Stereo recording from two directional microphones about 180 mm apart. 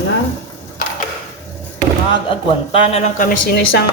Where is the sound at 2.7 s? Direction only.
35° left (ahead or behind).